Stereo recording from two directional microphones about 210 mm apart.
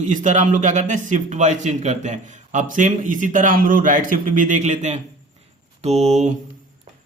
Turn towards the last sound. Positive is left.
turn(degrees=-35)  # may be behind; listen again after turning